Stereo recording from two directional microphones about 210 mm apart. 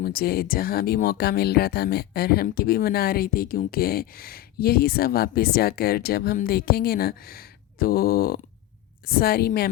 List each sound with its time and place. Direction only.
0.0 s speech: 45° left (ahead or behind)